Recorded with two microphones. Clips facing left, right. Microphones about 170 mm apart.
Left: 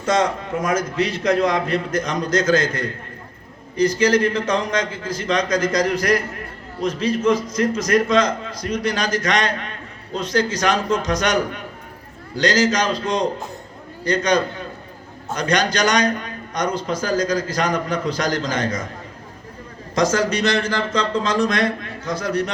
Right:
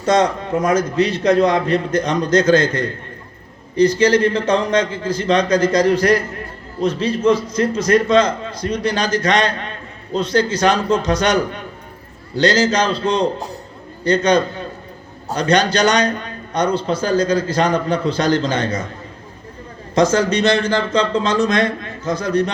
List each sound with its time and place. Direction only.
0.0 s a man's voice: 35° right (ahead or behind)
20.0 s a man's voice: 30° right (ahead or behind)